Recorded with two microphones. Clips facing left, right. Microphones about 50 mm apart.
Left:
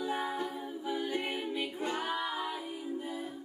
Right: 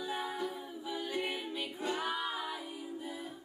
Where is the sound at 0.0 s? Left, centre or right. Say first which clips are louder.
Left 4 dB; left.